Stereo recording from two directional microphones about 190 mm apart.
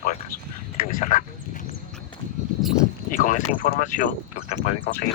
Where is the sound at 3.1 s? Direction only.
45° left (ahead or behind).